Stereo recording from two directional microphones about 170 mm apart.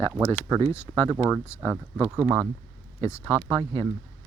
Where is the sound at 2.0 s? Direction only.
15° right (ahead or behind).